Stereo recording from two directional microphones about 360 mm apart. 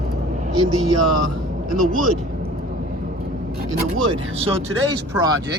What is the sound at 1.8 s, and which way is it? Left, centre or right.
Speech, right.